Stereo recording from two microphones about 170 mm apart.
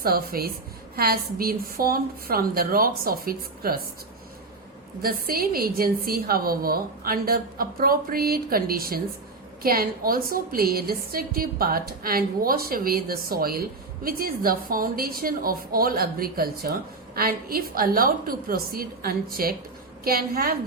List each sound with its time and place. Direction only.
0.0 s a woman's voice: 60° right (ahead or behind)
5.0 s a woman's voice: 60° right (ahead or behind)